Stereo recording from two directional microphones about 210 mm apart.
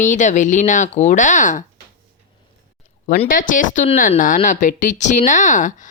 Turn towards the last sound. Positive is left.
turn(degrees=35)  # may be behind; listen again after turning